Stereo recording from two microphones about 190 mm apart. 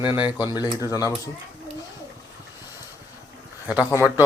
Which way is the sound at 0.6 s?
15° right (ahead or behind).